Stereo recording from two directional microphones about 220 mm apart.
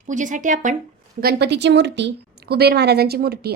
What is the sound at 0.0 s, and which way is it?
Speech, 35° right (ahead or behind).